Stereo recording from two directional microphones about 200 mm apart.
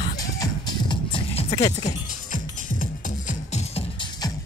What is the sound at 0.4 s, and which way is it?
Music, 20° left (ahead or behind).